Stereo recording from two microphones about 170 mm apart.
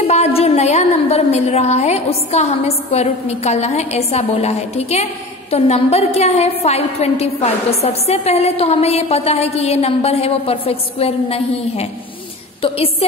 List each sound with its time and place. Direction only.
0.0 s a woman's voice: 40° left (ahead or behind)